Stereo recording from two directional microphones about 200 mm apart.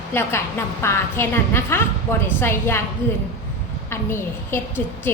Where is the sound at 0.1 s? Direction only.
10° left (ahead or behind).